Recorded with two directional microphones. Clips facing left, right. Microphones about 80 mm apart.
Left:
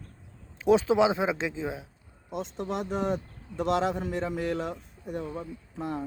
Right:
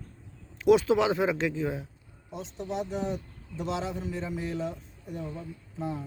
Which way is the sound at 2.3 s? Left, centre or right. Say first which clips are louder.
Left 3 dB; left.